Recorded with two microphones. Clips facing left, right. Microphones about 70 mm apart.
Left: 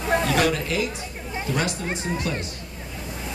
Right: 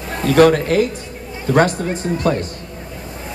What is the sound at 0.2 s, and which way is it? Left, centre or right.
Speech, right.